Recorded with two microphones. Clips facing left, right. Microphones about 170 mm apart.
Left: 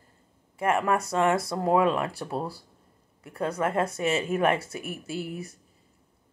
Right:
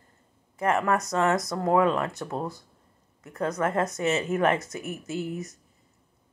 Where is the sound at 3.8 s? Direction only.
30° left (ahead or behind).